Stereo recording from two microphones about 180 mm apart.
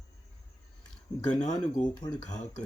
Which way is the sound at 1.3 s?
20° left (ahead or behind).